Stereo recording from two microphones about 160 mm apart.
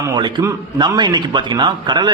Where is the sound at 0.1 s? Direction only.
30° right (ahead or behind).